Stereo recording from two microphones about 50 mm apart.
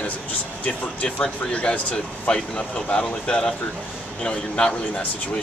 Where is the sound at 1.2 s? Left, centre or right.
Left.